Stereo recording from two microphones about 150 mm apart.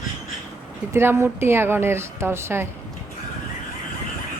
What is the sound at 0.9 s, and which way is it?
A woman's voice, 15° right (ahead or behind).